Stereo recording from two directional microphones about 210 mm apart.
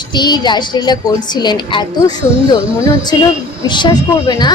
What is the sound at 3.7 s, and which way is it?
Speech, 20° left (ahead or behind).